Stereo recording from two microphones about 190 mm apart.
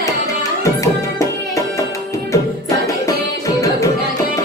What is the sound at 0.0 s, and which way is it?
Tabla, 15° left (ahead or behind).